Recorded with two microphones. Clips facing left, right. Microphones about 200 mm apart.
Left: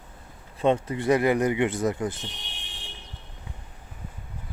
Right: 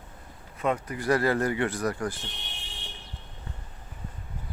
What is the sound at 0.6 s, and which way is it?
Speech, 25° left (ahead or behind).